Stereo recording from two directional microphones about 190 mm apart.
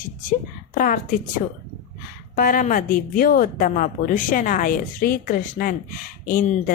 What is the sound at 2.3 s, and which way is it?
A woman's voice, 45° left (ahead or behind).